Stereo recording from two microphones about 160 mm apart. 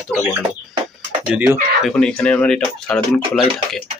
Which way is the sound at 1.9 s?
5° left (ahead or behind).